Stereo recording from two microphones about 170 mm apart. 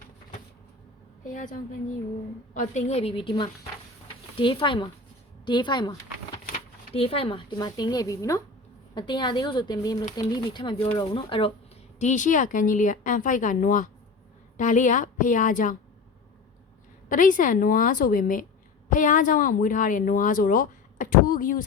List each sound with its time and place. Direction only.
1.3 s a woman's voice: 50° left (ahead or behind)
2.6 s a woman's voice: 40° left (ahead or behind)
11.9 s a woman's voice: 45° left (ahead or behind)
17.1 s a woman's voice: 50° left (ahead or behind)